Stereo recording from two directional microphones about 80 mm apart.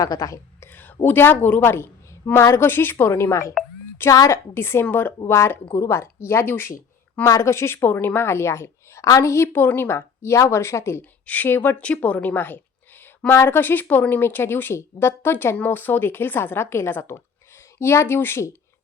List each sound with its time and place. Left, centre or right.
0.0 s a woman's voice: left
0.7 s a sound: left
1.0 s a woman's voice: left
1.6 s a woman's voice: left
4.5 s a woman's voice: left
5.2 s a woman's voice: left
7.3 s a woman's voice: left
11.3 s a woman's voice: left
11.8 s a woman's voice: centre; by 18.4 s left